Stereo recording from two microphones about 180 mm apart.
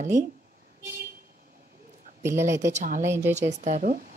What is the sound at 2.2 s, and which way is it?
Speech, 15° right (ahead or behind).